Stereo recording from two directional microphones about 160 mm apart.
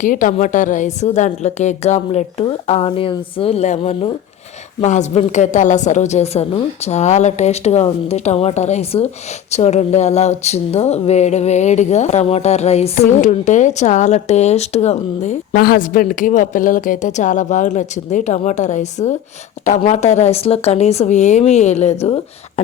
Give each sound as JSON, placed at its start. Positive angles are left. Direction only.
{"t": 0.0, "sound": "speech", "side_deg": 55}
{"t": 15.5, "sound": "speech", "side_deg": 70}